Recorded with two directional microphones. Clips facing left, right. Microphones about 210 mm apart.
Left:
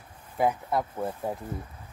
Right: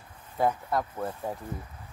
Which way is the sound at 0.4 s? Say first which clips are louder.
Left 1 dB; 10° left (ahead or behind).